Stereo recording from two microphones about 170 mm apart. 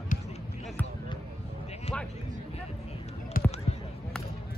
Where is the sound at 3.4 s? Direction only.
55° left (ahead or behind).